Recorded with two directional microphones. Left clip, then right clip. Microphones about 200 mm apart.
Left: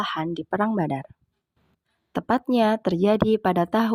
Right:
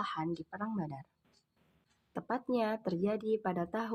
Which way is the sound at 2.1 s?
45° left (ahead or behind).